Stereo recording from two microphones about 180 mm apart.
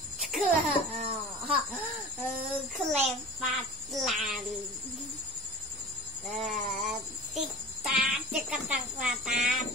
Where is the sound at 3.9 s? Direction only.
Centre (ahead or behind).